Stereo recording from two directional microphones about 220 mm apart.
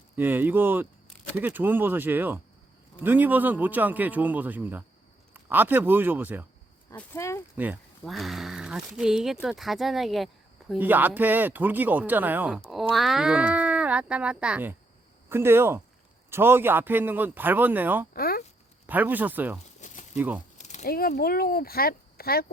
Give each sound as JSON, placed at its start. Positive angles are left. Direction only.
{"t": 0.2, "sound": "speech", "side_deg": -10}
{"t": 6.9, "sound": "speech", "side_deg": 10}
{"t": 7.5, "sound": "speech", "side_deg": -10}
{"t": 18.1, "sound": "a sound", "side_deg": 45}
{"t": 18.9, "sound": "speech", "side_deg": -10}
{"t": 19.8, "sound": "a sound", "side_deg": 35}
{"t": 20.1, "sound": "speech", "side_deg": -10}
{"t": 20.6, "sound": "speech", "side_deg": 30}